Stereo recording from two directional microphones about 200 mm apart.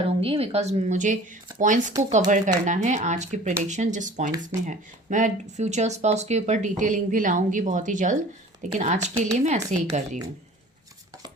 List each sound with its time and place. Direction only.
0.0 s speech: 30° right (ahead or behind)